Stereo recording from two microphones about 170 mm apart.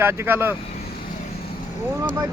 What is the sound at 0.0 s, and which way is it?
Speech, 15° right (ahead or behind).